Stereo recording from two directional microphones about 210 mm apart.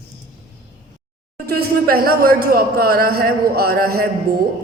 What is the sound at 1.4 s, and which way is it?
A woman's voice, 45° right (ahead or behind).